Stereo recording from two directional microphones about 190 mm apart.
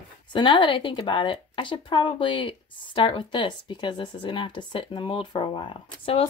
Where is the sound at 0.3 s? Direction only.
25° left (ahead or behind).